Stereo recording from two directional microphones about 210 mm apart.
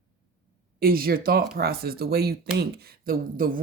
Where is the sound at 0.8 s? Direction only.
45° right (ahead or behind).